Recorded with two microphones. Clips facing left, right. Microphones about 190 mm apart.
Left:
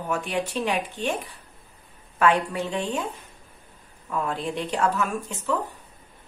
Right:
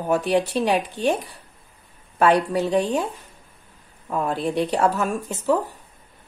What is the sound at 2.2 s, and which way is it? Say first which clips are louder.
Speech: right 4 dB; 40° right (ahead or behind).